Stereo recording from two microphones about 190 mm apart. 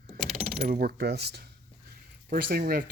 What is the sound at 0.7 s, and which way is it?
Speech, 50° right (ahead or behind).